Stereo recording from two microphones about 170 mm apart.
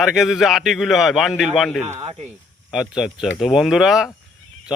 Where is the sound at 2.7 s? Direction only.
Centre (ahead or behind).